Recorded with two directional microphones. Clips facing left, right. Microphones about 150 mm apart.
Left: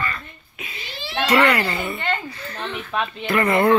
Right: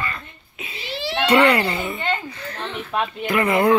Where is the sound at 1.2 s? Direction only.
30° right (ahead or behind).